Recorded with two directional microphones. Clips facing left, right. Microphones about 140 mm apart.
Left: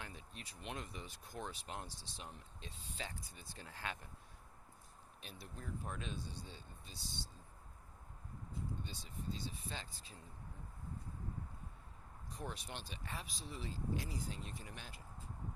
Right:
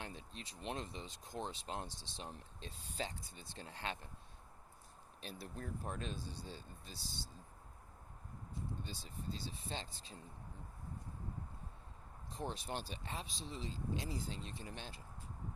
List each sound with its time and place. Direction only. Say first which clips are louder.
0.0 s speech: right 3 dB; 30° right (ahead or behind)
5.2 s speech: right 6 dB; 35° right (ahead or behind)
5.5 s speech: right 1 dB; 50° right (ahead or behind)
5.9 s speech: right 2 dB; 35° right (ahead or behind)
8.8 s speech: even; 35° right (ahead or behind)
12.3 s speech: right 4 dB; 25° right (ahead or behind)